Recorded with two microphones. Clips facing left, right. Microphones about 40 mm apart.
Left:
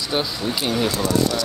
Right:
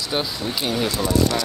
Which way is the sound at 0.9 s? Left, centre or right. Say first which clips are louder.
Even; centre.